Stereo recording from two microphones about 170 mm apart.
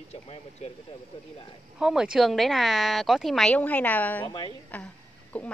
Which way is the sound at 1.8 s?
5° right (ahead or behind).